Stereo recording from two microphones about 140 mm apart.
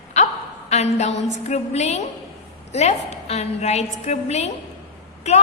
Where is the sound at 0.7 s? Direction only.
50° left (ahead or behind).